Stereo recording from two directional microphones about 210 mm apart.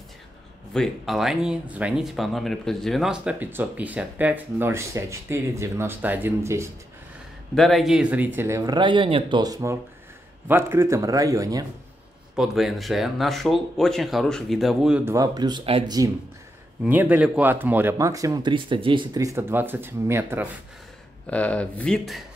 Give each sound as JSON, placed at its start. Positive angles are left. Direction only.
{"t": 0.7, "sound": "speech", "side_deg": 0}
{"t": 7.5, "sound": "speech", "side_deg": 0}
{"t": 12.4, "sound": "speech", "side_deg": 0}
{"t": 15.1, "sound": "speech", "side_deg": -20}
{"t": 16.8, "sound": "speech", "side_deg": -10}
{"t": 21.3, "sound": "speech", "side_deg": 5}